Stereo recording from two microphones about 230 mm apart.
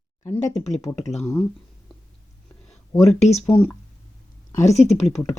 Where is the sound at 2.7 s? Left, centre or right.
Centre.